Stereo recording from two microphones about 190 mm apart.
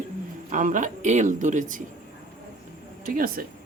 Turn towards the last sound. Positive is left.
turn(degrees=-50)  # may be behind; listen again after turning